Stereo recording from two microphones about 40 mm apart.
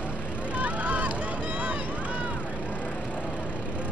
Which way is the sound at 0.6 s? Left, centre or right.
Right.